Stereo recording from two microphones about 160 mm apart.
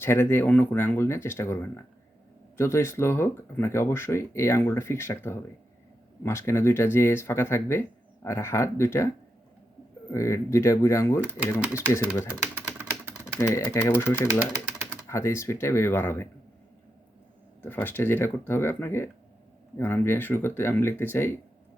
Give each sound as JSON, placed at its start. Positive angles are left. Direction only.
{"t": 0.0, "sound": "speech", "side_deg": 15}
{"t": 12.3, "sound": "typing", "side_deg": -10}
{"t": 13.4, "sound": "speech", "side_deg": 20}
{"t": 17.6, "sound": "speech", "side_deg": 10}